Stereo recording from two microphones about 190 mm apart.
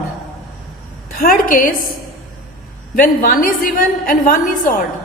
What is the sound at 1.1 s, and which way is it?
Speech, 50° left (ahead or behind).